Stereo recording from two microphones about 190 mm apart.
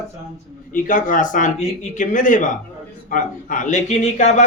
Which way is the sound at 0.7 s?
45° left (ahead or behind).